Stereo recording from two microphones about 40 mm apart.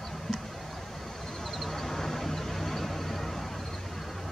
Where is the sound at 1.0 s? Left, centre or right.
Centre.